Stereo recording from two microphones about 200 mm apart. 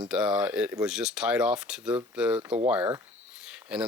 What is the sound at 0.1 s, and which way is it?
Speech, 5° right (ahead or behind).